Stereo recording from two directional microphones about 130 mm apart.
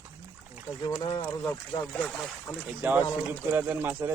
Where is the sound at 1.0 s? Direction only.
40° left (ahead or behind).